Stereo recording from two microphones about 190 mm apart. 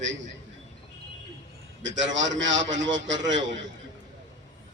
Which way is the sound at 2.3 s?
75° right (ahead or behind).